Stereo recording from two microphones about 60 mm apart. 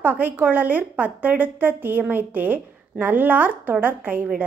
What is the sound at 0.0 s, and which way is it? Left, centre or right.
A woman's voice, right.